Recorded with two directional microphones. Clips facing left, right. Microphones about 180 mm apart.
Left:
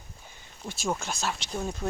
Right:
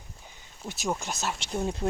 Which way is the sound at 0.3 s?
15° right (ahead or behind).